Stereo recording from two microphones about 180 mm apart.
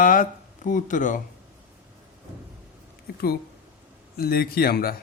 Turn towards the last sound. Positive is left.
turn(degrees=55)  # may be behind; listen again after turning